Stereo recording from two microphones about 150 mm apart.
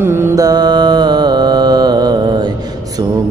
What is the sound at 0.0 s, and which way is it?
Mantra, 15° right (ahead or behind).